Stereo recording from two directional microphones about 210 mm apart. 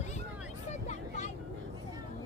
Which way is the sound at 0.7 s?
35° left (ahead or behind).